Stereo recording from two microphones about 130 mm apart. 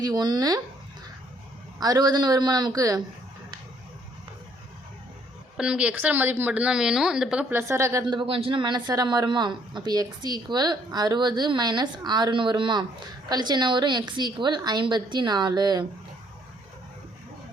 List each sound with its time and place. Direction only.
0.0 s a man's voice: 35° right (ahead or behind)
1.8 s a man's voice: 30° right (ahead or behind)
5.5 s a woman's voice: 10° right (ahead or behind)
7.5 s a woman's voice: 20° right (ahead or behind)
8.0 s a man's voice: 40° right (ahead or behind)